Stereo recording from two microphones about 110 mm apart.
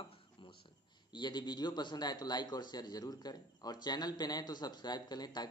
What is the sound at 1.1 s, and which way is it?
Speech, 45° left (ahead or behind).